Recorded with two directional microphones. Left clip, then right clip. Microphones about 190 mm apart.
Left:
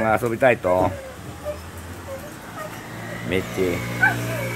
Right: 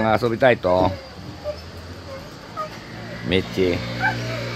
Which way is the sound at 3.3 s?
25° right (ahead or behind).